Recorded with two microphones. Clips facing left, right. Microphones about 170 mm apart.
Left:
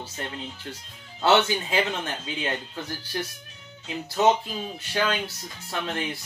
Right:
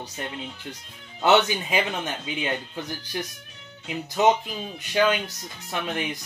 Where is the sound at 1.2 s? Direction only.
15° right (ahead or behind).